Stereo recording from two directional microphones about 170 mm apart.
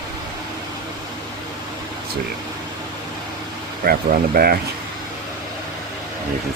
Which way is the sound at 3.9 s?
60° right (ahead or behind).